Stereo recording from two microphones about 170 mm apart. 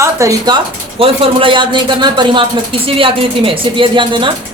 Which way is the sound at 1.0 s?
30° right (ahead or behind).